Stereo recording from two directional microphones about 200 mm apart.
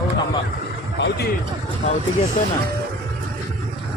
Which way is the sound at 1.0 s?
55° left (ahead or behind).